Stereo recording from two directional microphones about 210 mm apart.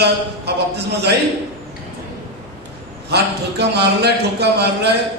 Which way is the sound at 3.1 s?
50° right (ahead or behind).